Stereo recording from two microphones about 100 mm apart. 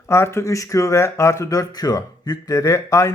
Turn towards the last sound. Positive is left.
turn(degrees=30)  # may be behind; listen again after turning